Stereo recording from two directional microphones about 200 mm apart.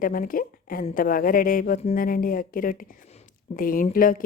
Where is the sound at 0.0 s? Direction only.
45° left (ahead or behind).